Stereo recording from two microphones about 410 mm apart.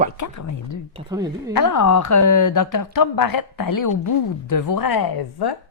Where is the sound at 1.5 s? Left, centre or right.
Left.